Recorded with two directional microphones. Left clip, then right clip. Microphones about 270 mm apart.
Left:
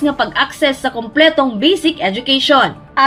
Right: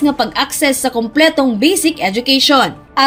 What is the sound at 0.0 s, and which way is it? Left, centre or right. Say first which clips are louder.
A woman's voice: even; right.